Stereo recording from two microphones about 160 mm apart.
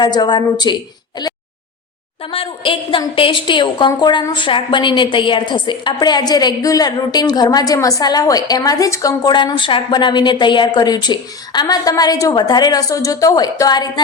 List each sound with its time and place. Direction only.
0.0 s a woman's voice: 25° left (ahead or behind)
1.2 s a sound: 25° left (ahead or behind)
2.2 s a woman's voice: 35° left (ahead or behind)